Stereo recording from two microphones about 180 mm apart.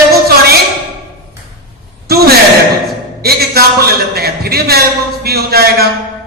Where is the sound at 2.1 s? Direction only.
60° right (ahead or behind).